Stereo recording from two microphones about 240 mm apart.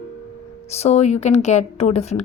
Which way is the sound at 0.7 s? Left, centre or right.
Left.